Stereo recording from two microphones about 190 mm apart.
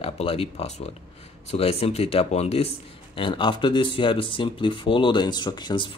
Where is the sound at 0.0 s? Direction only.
30° left (ahead or behind).